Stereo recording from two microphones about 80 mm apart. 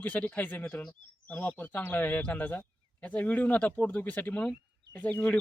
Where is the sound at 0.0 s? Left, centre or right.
Left.